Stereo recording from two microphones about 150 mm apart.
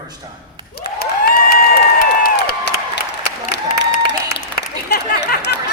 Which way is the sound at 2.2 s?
90° left.